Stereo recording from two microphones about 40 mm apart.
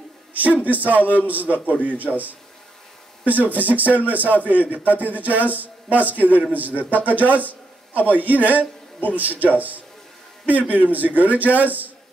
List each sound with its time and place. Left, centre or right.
0.3 s a man's voice: right